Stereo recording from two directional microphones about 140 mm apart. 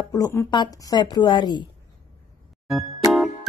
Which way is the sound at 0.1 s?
20° left (ahead or behind).